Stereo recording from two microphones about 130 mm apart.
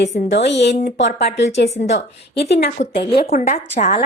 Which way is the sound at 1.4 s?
60° left (ahead or behind).